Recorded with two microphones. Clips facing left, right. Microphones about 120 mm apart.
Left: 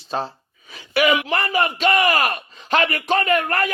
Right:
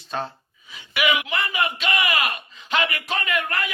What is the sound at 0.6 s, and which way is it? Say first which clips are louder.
Speech: left 5 dB; 40° left (ahead or behind).